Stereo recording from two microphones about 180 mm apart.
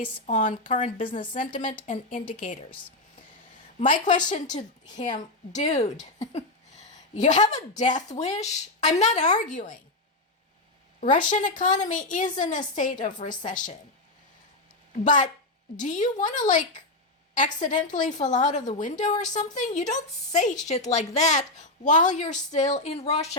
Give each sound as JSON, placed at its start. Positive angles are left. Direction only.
{"t": 0.3, "sound": "a woman's voice", "side_deg": 40}
{"t": 3.8, "sound": "a woman's voice", "side_deg": 45}
{"t": 11.0, "sound": "a woman's voice", "side_deg": 45}
{"t": 15.8, "sound": "a woman's voice", "side_deg": 45}